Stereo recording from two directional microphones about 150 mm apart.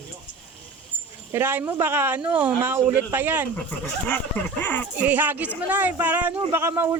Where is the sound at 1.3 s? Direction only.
15° right (ahead or behind).